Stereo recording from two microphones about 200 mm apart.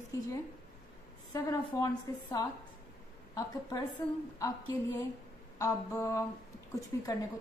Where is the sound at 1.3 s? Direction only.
20° left (ahead or behind).